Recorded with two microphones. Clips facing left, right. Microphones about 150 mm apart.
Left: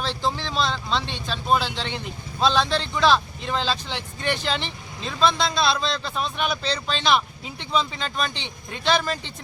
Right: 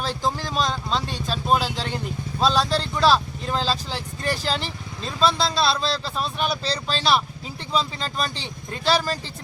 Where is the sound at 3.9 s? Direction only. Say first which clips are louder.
Even; 35° right (ahead or behind).